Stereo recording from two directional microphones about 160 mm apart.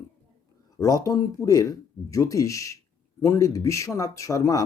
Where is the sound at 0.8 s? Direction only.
20° left (ahead or behind).